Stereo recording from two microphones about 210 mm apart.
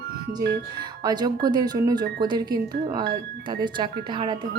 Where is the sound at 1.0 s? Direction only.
20° right (ahead or behind).